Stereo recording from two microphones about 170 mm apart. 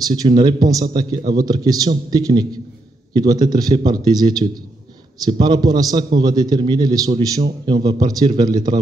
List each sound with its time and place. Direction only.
0.1 s a man's voice: 25° right (ahead or behind)